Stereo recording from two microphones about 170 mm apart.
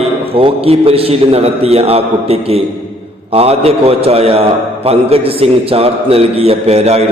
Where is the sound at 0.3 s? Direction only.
35° right (ahead or behind).